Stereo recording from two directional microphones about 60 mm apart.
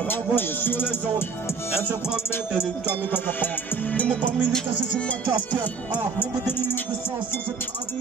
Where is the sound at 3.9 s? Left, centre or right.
Left.